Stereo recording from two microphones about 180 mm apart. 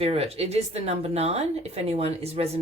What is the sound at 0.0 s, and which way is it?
Speech, 35° right (ahead or behind).